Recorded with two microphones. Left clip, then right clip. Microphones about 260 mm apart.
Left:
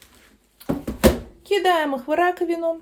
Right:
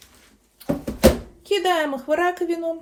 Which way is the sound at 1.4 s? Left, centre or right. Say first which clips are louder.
Left 1 dB; left.